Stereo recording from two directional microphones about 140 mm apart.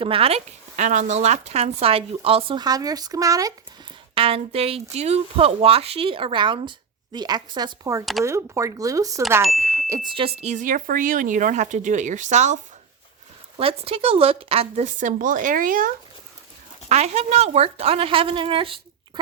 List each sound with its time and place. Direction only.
0.0 s speech: 40° right (ahead or behind)
2.6 s speech: 25° right (ahead or behind)
4.1 s speech: 40° right (ahead or behind); by 9.2 s 25° right (ahead or behind)
9.6 s ding: 20° right (ahead or behind)
10.1 s speech: 40° right (ahead or behind)
13.6 s speech: 40° right (ahead or behind); by 15.9 s 75° right (ahead or behind)
16.9 s speech: 50° right (ahead or behind)